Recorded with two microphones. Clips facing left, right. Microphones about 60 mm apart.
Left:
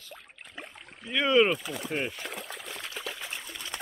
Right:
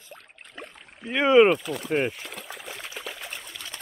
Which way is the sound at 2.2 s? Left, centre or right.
Centre.